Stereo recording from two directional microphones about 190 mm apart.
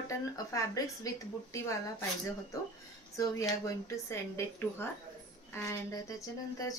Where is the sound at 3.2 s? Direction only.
15° left (ahead or behind).